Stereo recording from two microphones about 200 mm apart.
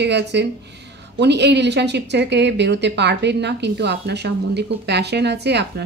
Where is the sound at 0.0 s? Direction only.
60° right (ahead or behind).